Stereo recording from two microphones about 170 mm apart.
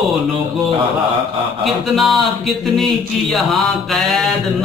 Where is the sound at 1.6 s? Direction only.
Centre (ahead or behind).